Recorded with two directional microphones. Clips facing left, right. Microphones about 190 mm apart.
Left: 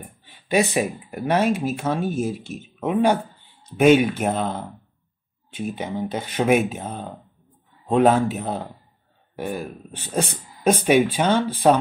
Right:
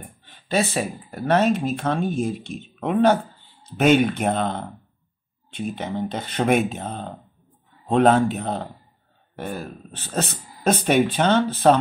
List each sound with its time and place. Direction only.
0.2 s speech: 10° left (ahead or behind)